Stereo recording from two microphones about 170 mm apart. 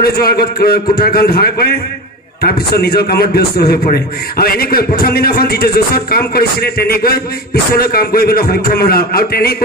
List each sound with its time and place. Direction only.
0.0 s a man's voice: 65° left (ahead or behind)